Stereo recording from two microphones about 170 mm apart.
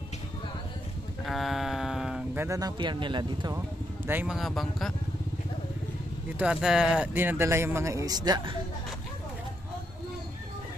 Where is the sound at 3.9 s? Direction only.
10° right (ahead or behind).